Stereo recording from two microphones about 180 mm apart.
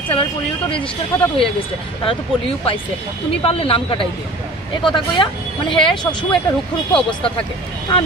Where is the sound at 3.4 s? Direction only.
30° left (ahead or behind).